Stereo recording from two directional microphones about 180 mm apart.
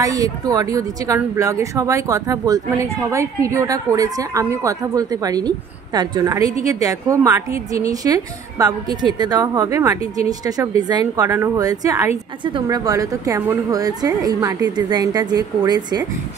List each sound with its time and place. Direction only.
0.0 s a woman's voice: 20° right (ahead or behind)